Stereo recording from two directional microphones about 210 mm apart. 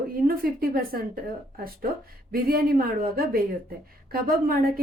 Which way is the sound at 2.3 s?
45° right (ahead or behind).